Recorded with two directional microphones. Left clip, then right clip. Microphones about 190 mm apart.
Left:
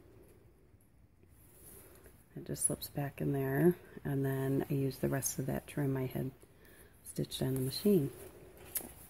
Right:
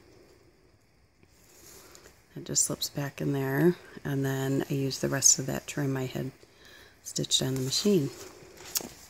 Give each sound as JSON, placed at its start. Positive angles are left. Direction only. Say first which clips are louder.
{"t": 2.4, "sound": "speech", "louder": "right 11 dB", "side_deg": -20}